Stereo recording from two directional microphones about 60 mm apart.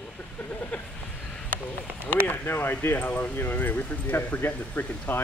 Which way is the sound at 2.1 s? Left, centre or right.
Left.